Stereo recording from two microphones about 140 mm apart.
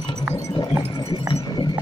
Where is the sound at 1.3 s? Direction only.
35° left (ahead or behind).